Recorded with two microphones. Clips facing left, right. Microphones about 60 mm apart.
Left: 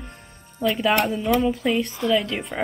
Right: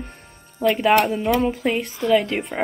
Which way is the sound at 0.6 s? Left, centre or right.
Right.